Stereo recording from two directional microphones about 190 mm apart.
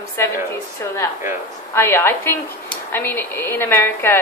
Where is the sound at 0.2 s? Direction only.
15° left (ahead or behind).